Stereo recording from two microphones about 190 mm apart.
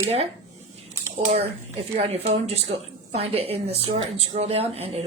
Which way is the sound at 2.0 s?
35° right (ahead or behind).